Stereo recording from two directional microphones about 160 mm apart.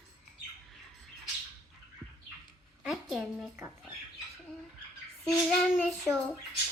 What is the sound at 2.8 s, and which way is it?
Speech, 5° right (ahead or behind).